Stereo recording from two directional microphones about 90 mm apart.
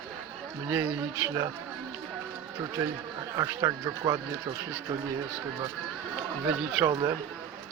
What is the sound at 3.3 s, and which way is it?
Speech, 45° right (ahead or behind).